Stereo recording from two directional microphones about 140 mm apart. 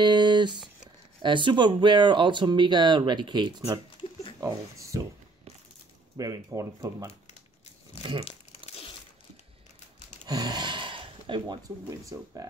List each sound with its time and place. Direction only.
0.0 s a sound: 35° right (ahead or behind)
1.2 s speech: 35° right (ahead or behind)
4.0 s a sound: 40° left (ahead or behind)
4.4 s speech: 25° right (ahead or behind)
6.1 s speech: 25° right (ahead or behind)
8.0 s speech: 35° right (ahead or behind)
8.3 s crumpling: 45° left (ahead or behind)
10.2 s speech: 30° right (ahead or behind)